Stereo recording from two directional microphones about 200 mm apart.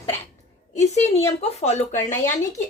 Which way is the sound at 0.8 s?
35° left (ahead or behind).